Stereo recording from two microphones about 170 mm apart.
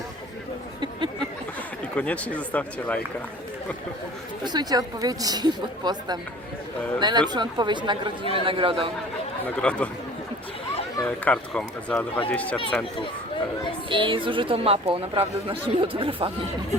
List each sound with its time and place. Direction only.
0.8 s a sound: 25° right (ahead or behind)
1.8 s speech: 10° left (ahead or behind)
4.4 s a woman's voice: 25° right (ahead or behind)
9.6 s speech: 5° left (ahead or behind)
11.0 s speech: 10° left (ahead or behind)
13.9 s speech: 30° right (ahead or behind)